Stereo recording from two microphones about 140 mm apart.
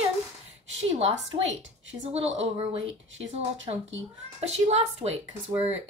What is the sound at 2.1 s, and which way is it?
Speech, 50° right (ahead or behind).